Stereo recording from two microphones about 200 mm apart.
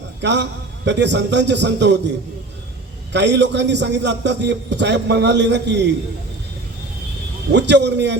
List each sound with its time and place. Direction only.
0.2 s a man's voice: 60° right (ahead or behind)
3.1 s a man's voice: 60° right (ahead or behind)
7.5 s a man's voice: 60° right (ahead or behind)